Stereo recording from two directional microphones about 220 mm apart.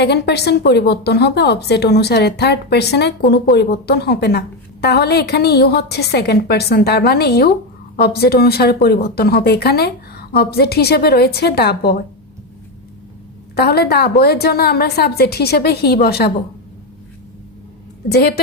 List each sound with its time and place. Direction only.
0.0 s a woman's voice: 50° left (ahead or behind)
13.6 s a woman's voice: 45° left (ahead or behind)
18.1 s a woman's voice: 45° left (ahead or behind)